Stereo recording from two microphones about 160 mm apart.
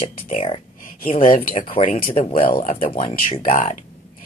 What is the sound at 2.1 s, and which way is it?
Speech, 35° left (ahead or behind).